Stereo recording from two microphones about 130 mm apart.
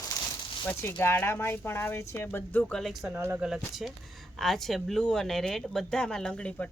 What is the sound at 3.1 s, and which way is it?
Speech, 20° right (ahead or behind).